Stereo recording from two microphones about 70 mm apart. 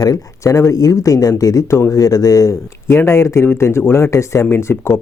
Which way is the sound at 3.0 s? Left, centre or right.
Left.